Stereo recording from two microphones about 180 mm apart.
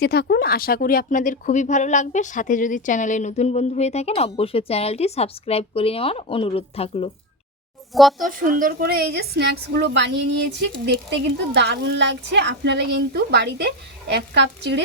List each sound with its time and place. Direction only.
0.0 s speech: 60° left (ahead or behind); by 7.1 s 35° left (ahead or behind)
7.9 s speech: centre (ahead or behind)
8.3 s a woman's voice: 50° right (ahead or behind); by 14.8 s 75° right (ahead or behind)